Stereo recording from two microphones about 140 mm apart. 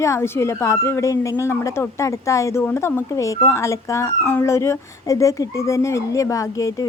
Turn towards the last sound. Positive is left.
turn(degrees=25)  # may be behind; listen again after turning